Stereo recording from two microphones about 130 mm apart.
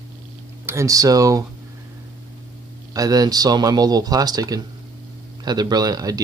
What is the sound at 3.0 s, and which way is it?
Speech, 25° right (ahead or behind).